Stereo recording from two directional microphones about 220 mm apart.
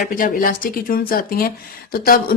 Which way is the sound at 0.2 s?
40° left (ahead or behind).